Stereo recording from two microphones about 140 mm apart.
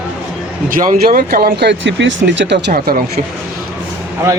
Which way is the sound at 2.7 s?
90° right.